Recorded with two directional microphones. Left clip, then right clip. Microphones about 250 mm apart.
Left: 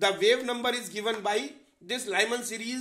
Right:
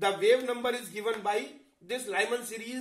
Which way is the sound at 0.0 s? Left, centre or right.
Left.